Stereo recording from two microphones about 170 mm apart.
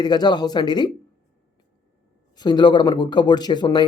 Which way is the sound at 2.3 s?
25° left (ahead or behind).